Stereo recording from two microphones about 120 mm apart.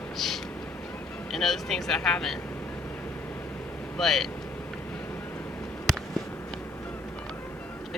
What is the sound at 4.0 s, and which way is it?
Speech, centre (ahead or behind).